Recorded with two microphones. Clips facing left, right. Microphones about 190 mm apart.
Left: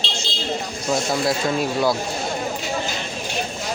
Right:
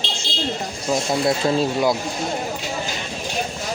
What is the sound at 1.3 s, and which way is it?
Speech, 30° right (ahead or behind).